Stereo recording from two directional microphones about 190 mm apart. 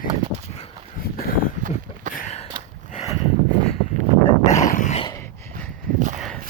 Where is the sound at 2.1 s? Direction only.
40° left (ahead or behind).